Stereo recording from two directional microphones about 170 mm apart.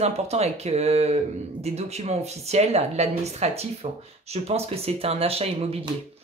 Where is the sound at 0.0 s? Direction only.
40° right (ahead or behind).